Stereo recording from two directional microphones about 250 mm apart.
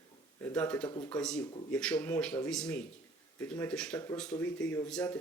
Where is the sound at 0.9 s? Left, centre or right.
Left.